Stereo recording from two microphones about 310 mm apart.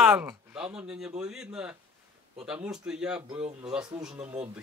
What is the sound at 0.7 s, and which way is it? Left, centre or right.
Speech, centre.